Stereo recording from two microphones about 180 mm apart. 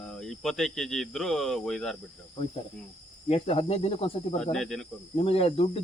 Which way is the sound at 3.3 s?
35° left (ahead or behind).